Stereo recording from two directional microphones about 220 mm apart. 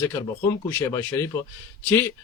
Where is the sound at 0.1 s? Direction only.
15° left (ahead or behind).